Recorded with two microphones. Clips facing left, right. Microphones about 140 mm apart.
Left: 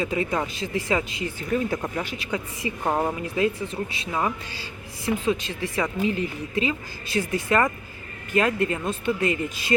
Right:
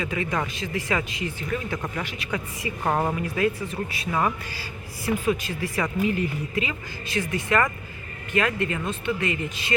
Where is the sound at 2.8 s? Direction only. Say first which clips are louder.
Even; 5° left (ahead or behind).